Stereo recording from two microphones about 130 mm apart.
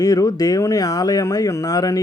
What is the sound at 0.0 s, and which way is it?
Speech, 25° left (ahead or behind).